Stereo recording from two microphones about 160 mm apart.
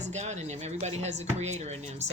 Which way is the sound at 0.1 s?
45° right (ahead or behind).